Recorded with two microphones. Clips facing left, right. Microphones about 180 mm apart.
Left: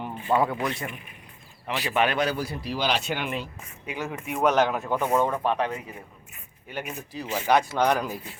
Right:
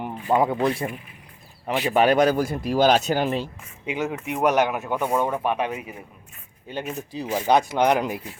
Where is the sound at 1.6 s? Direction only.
40° right (ahead or behind).